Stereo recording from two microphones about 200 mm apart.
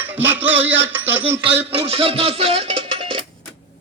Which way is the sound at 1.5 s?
30° right (ahead or behind).